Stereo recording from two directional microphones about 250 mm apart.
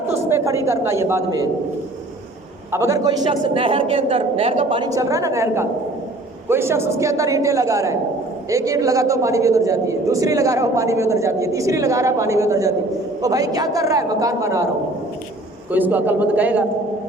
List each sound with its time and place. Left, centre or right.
0.3 s a man's voice: centre
2.7 s a man's voice: centre
15.7 s a man's voice: centre